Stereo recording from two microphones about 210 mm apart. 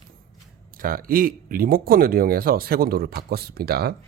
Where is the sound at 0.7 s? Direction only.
45° right (ahead or behind).